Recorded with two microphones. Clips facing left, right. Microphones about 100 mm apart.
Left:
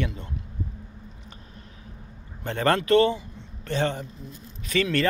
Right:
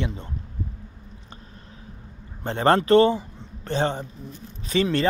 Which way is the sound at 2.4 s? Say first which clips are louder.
Right 3 dB; 30° right (ahead or behind).